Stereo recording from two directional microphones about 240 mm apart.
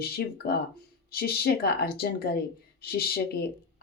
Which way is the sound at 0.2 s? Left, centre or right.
Left.